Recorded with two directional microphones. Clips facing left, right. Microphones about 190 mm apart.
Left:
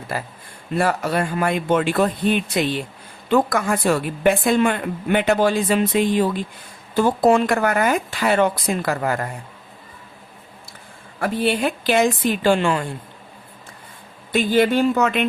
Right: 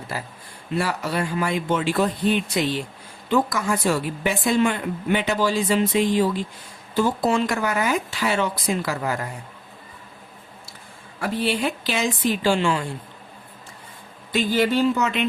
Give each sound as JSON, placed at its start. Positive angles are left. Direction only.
{"t": 0.1, "sound": "a woman's voice", "side_deg": 55}
{"t": 11.2, "sound": "a woman's voice", "side_deg": 55}
{"t": 14.3, "sound": "speech", "side_deg": 50}